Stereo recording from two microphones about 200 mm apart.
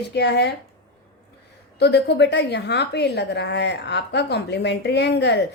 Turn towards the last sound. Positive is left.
turn(degrees=60)  # may be behind; listen again after turning